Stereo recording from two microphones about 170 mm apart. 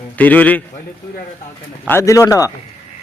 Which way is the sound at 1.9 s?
15° left (ahead or behind).